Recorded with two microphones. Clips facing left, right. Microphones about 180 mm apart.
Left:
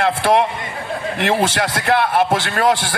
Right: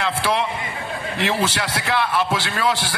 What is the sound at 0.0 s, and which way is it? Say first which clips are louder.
A man's voice: left 6 dB; 50° left (ahead or behind).